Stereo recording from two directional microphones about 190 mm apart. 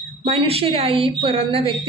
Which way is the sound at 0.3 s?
30° right (ahead or behind).